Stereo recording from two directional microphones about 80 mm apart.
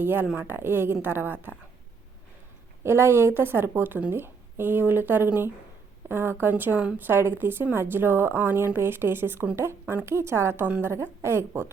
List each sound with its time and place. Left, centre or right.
0.0 s a woman's voice: right
2.8 s a woman's voice: right